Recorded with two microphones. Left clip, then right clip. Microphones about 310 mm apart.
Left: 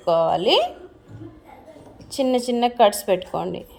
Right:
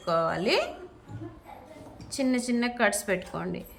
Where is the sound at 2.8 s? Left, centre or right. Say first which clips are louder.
Left 9 dB; left.